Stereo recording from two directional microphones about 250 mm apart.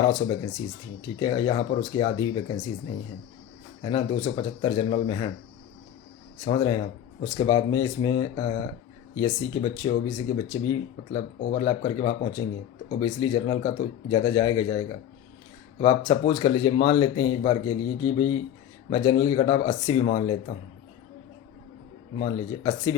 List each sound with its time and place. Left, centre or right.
0.0 s speech: centre
3.8 s speech: centre
6.4 s speech: centre
22.2 s speech: centre